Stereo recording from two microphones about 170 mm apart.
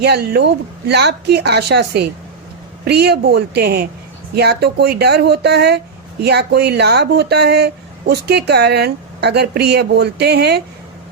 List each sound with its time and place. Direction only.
0.0 s speech: 75° right (ahead or behind)